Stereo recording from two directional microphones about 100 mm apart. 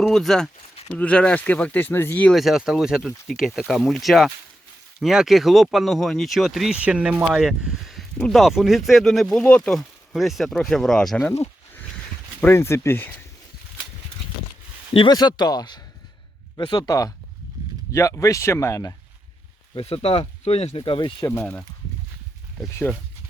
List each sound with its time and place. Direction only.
0.0 s speech: 5° left (ahead or behind); by 2.3 s 20° left (ahead or behind)
2.3 s speech: centre (ahead or behind)
9.7 s speech: centre (ahead or behind)
12.4 s speech: 25° left (ahead or behind)
15.1 s speech: 45° left (ahead or behind)
19.7 s speech: 75° left (ahead or behind)
22.8 s speech: 10° left (ahead or behind)